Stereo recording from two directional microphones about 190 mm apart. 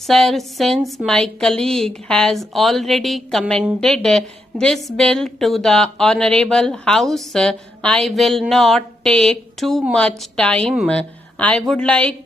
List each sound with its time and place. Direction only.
0.1 s speech: centre (ahead or behind)